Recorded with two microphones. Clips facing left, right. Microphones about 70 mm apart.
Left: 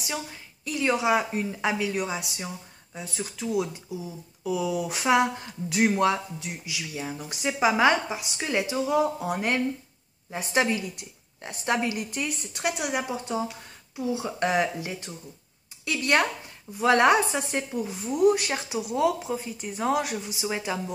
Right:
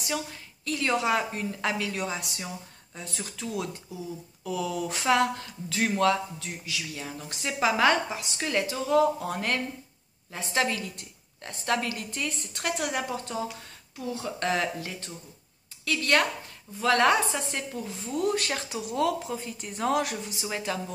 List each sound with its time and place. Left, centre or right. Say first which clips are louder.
0.0 s speech: right 1 dB; centre